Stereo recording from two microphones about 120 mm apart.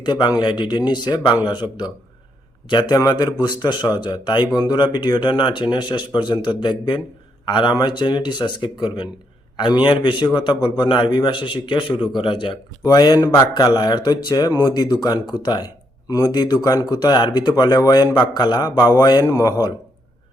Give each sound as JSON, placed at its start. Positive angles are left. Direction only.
{"t": 0.0, "sound": "speech", "side_deg": 35}
{"t": 2.6, "sound": "speech", "side_deg": 40}